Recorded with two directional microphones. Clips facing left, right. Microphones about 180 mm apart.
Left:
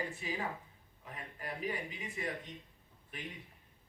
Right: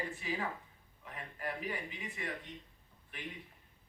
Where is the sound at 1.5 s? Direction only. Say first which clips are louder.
Left 2 dB; 40° left (ahead or behind).